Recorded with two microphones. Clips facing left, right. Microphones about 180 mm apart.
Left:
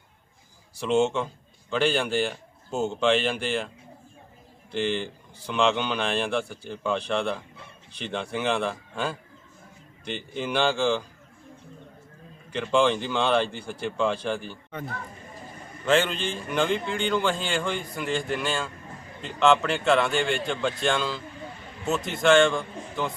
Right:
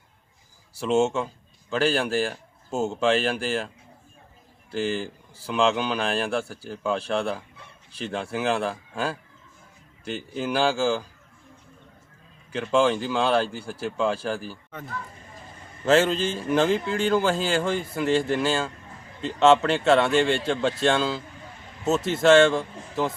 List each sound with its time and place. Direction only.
0.8 s speech: 5° right (ahead or behind)
4.7 s speech: 5° right (ahead or behind)
12.5 s speech: 5° right (ahead or behind)
15.9 s a man's voice: 40° right (ahead or behind)
16.1 s speech: 5° right (ahead or behind)
16.5 s a man's voice: 35° right (ahead or behind)
22.2 s a man's voice: 35° right (ahead or behind)